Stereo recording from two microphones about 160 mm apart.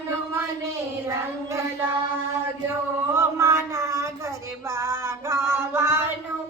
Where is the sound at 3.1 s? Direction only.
20° right (ahead or behind).